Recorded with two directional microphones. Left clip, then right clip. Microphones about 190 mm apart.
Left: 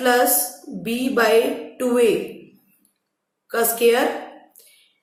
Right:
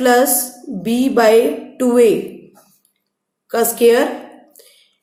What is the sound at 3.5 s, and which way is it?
Speech, 45° right (ahead or behind).